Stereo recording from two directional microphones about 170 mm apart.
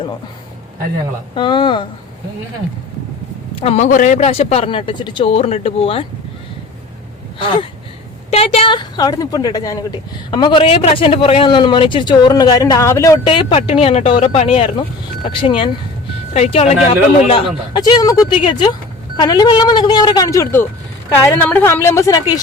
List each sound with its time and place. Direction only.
1.4 s a woman's voice: 30° left (ahead or behind)
3.5 s a man's voice: 35° left (ahead or behind)
7.3 s a woman's voice: 30° left (ahead or behind)
13.2 s a man's voice: 30° left (ahead or behind)
17.7 s a woman's voice: 20° left (ahead or behind)